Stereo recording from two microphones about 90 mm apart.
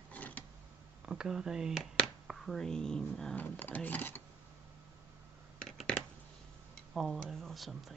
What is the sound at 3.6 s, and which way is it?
Speech, 20° left (ahead or behind).